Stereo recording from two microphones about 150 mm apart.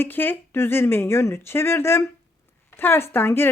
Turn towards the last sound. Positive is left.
turn(degrees=15)  # may be behind; listen again after turning